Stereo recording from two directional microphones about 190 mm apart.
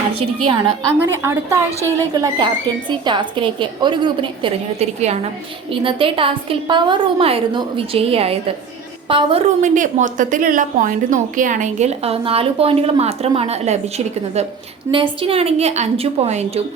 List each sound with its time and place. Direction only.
0.4 s a woman's voice: 25° right (ahead or behind)
1.1 s a woman's voice: 15° right (ahead or behind)
9.6 s a woman's voice: 40° right (ahead or behind)